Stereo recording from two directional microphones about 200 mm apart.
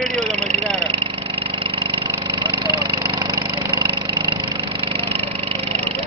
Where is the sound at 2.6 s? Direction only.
20° right (ahead or behind).